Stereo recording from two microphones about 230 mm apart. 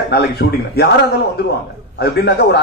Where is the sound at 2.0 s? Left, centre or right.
Left.